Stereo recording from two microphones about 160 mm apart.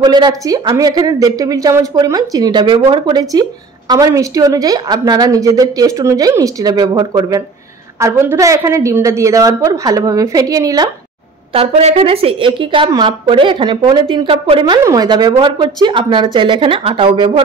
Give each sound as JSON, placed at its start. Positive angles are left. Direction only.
{"t": 0.0, "sound": "speech", "side_deg": -25}
{"t": 11.5, "sound": "a woman's voice", "side_deg": -35}